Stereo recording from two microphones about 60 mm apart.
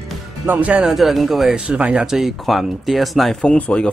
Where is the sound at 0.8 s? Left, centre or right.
Centre.